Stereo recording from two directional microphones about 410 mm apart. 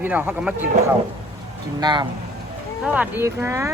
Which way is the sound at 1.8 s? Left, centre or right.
Centre.